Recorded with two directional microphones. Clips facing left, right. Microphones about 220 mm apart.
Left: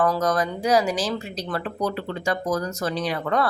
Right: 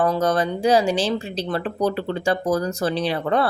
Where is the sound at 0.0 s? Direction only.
30° right (ahead or behind).